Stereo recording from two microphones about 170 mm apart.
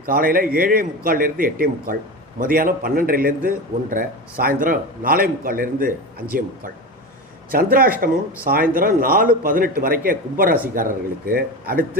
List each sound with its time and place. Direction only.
0.0 s a man's voice: 55° right (ahead or behind)
7.5 s a man's voice: 60° right (ahead or behind)